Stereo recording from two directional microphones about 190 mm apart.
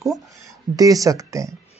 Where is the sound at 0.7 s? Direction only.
20° right (ahead or behind).